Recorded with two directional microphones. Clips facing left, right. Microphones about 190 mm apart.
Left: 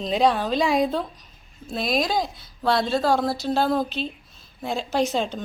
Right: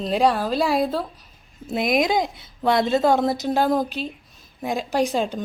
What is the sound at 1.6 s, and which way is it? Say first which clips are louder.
Speech: right 4 dB; 20° right (ahead or behind).